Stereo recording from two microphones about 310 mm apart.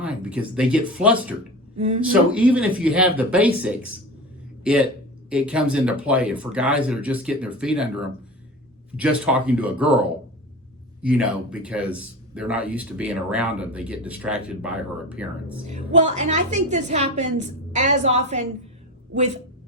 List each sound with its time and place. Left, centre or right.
0.0 s speech: centre
1.7 s speech: centre
2.3 s speech: centre
15.6 s a woman's voice: right